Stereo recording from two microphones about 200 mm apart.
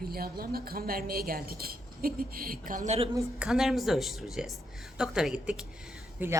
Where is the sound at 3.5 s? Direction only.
Centre (ahead or behind).